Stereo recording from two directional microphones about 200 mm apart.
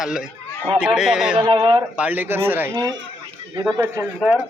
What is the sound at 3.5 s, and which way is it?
Speech, 20° right (ahead or behind).